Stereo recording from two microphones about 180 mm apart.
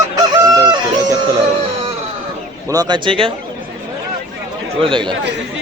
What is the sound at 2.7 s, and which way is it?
Speech, 20° right (ahead or behind).